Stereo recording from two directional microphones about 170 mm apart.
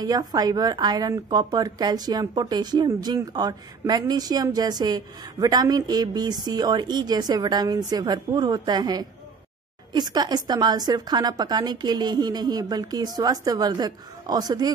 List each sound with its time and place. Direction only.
0.0 s a woman's voice: 20° right (ahead or behind)